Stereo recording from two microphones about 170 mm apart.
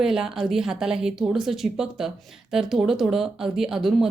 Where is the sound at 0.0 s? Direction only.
5° right (ahead or behind).